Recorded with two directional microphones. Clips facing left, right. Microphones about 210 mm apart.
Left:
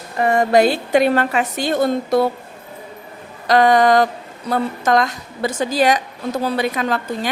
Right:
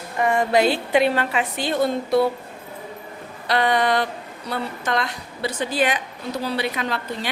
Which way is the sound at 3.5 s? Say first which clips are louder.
Left 7 dB; 45° left (ahead or behind).